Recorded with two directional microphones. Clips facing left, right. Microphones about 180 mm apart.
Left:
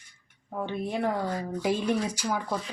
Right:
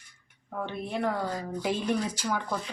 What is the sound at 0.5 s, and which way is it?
Speech, 10° left (ahead or behind).